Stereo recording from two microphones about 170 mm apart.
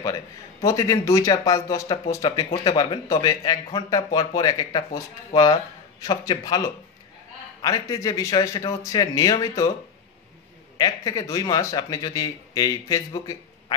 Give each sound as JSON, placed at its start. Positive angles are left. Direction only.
{"t": 0.7, "sound": "speech", "side_deg": 20}
{"t": 7.6, "sound": "speech", "side_deg": 20}
{"t": 10.8, "sound": "speech", "side_deg": 20}